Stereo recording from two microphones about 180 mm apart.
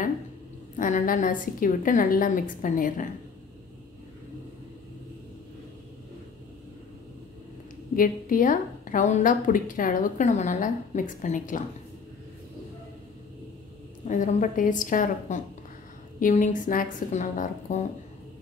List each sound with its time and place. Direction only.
0.7 s a woman's voice: 45° left (ahead or behind)
7.9 s a woman's voice: 50° left (ahead or behind)
14.0 s a woman's voice: 45° left (ahead or behind)